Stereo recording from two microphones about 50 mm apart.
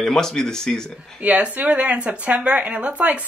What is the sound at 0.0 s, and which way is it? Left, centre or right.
Speech, centre.